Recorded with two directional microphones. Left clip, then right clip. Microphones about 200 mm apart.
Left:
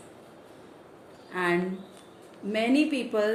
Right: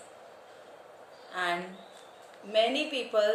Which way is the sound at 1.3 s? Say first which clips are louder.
Left 3 dB; 25° left (ahead or behind).